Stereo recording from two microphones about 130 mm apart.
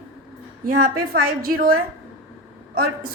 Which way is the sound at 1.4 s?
90° right.